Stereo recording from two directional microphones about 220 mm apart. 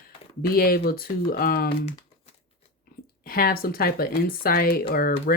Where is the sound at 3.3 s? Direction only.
40° left (ahead or behind).